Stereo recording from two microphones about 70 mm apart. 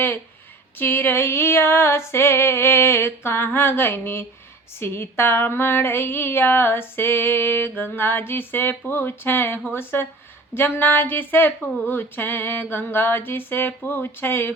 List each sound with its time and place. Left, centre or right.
0.8 s female singing: left